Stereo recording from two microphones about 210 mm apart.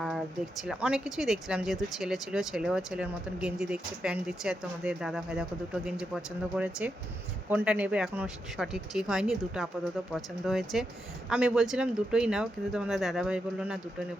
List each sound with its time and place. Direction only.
0.6 s speech: 5° right (ahead or behind)